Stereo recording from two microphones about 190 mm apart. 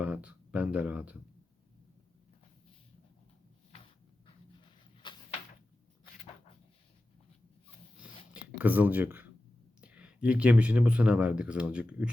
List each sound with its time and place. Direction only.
0.0 s speech: 5° right (ahead or behind)
5.0 s a sound: 25° left (ahead or behind)
8.3 s speech: 10° right (ahead or behind)